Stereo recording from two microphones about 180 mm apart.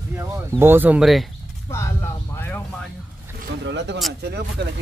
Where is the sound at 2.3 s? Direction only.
10° left (ahead or behind).